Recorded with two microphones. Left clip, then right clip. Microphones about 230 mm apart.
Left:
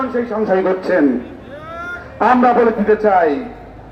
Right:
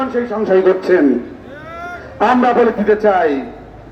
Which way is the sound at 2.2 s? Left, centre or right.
Right.